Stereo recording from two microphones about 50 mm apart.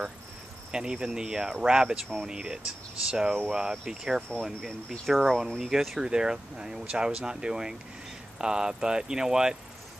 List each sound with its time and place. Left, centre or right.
0.7 s speech: centre
4.5 s speech: centre
5.9 s speech: centre